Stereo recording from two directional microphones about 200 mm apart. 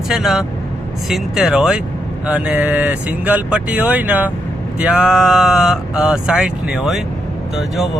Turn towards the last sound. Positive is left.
turn(degrees=0)  # may be behind; listen again after turning